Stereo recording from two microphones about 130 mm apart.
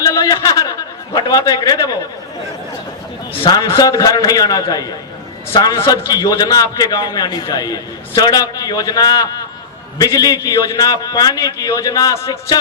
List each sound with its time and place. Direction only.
0.0 s a man's voice: 30° left (ahead or behind)
3.4 s a man's voice: 30° left (ahead or behind)